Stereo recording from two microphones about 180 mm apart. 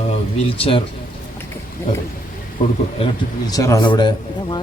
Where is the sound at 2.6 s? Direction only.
45° left (ahead or behind).